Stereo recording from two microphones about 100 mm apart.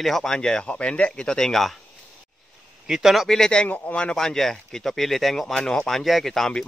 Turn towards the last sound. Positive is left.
turn(degrees=5)  # may be behind; listen again after turning